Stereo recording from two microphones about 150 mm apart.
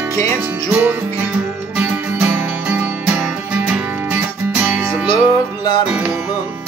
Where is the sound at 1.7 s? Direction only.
5° right (ahead or behind).